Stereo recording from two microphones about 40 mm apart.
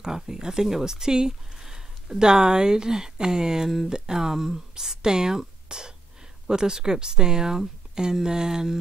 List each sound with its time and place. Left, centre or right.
0.0 s speech: centre